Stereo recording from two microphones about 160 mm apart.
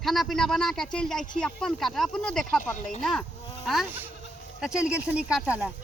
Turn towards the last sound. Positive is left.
turn(degrees=-10)  # may be behind; listen again after turning